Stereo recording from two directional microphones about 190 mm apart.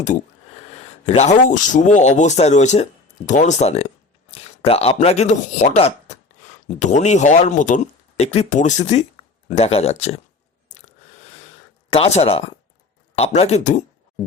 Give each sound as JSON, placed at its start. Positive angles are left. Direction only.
{"t": 1.0, "sound": "speech", "side_deg": 35}
{"t": 11.9, "sound": "speech", "side_deg": 35}